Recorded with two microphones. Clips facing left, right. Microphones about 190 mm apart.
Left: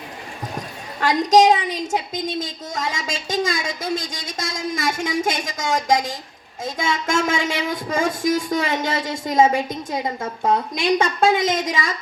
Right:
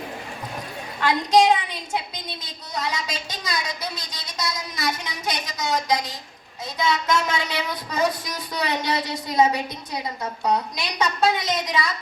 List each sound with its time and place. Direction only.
0.9 s speech: 40° left (ahead or behind)